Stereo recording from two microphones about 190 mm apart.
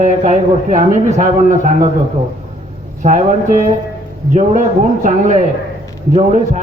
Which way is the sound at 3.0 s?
40° right (ahead or behind).